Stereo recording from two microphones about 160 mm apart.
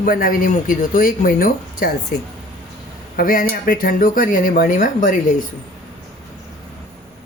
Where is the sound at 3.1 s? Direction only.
65° left (ahead or behind).